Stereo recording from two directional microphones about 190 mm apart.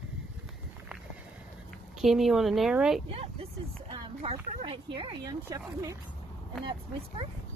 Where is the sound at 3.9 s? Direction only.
25° right (ahead or behind).